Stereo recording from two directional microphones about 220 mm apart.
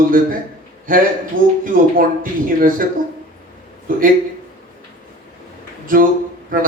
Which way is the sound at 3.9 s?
40° right (ahead or behind).